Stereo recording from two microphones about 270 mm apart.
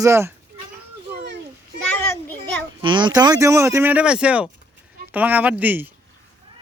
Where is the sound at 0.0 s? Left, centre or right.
Centre.